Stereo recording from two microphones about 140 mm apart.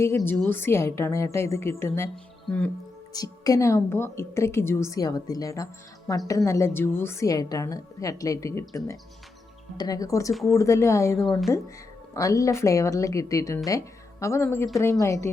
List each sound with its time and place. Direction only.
0.3 s a woman's voice: 15° left (ahead or behind)
3.1 s a woman's voice: 25° left (ahead or behind)